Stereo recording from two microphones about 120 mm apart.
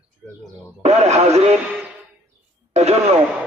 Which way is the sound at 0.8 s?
65° right (ahead or behind).